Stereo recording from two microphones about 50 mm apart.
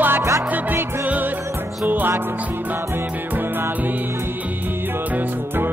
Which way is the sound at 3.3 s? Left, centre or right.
Right.